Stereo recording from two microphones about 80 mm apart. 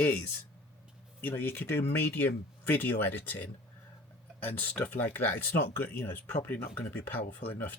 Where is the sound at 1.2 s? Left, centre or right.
Left.